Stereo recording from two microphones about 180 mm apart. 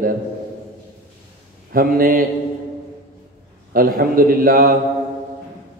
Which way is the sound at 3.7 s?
55° right (ahead or behind).